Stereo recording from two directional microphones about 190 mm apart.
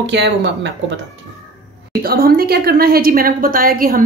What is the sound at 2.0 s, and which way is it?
A woman's voice, 50° right (ahead or behind).